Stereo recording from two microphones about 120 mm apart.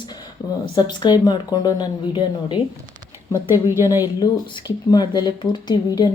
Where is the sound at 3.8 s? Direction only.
30° left (ahead or behind).